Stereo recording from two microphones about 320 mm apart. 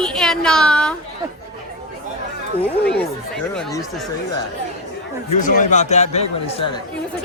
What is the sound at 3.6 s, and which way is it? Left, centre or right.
Speech, centre.